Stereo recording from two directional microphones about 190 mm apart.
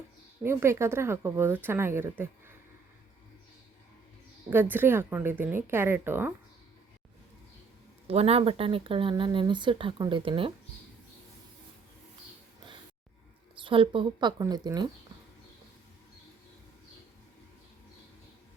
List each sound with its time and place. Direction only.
0.4 s speech: 15° right (ahead or behind)
4.4 s speech: 10° right (ahead or behind)
8.0 s speech: 30° right (ahead or behind)
13.7 s speech: 25° right (ahead or behind)